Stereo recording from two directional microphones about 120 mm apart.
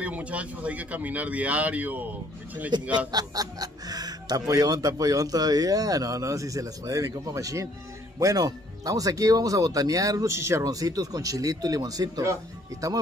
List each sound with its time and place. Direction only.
0.0 s speech: 10° right (ahead or behind)
3.1 s speech: 35° right (ahead or behind)